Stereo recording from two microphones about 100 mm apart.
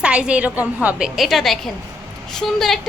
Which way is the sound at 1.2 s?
Centre (ahead or behind).